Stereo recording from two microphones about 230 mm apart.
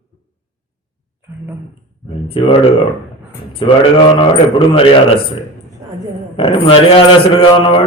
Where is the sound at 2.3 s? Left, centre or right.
Left.